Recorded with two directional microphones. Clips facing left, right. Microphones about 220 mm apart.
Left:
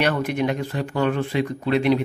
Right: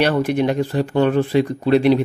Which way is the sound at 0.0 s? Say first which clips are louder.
Right 5 dB; 30° right (ahead or behind).